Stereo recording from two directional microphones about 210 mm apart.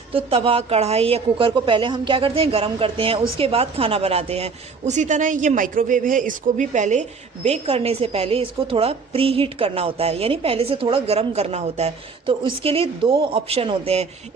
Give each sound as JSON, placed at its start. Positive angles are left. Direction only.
{"t": 0.1, "sound": "a woman's voice", "side_deg": -25}